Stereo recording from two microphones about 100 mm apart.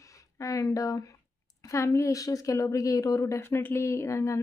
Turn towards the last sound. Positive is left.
turn(degrees=30)  # may be behind; listen again after turning